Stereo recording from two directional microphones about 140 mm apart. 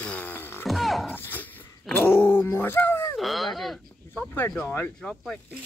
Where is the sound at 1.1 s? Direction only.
15° left (ahead or behind).